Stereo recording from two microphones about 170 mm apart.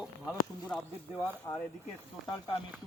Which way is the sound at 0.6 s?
5° left (ahead or behind).